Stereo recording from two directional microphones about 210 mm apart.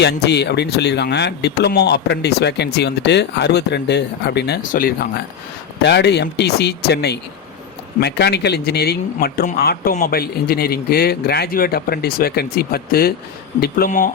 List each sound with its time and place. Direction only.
0.0 s speech: 55° left (ahead or behind)